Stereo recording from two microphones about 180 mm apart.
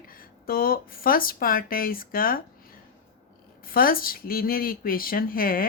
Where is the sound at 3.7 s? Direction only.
55° left (ahead or behind).